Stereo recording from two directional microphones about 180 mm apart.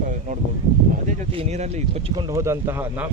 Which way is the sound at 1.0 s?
40° right (ahead or behind).